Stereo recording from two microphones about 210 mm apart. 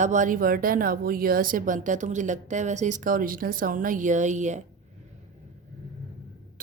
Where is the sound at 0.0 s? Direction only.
35° right (ahead or behind).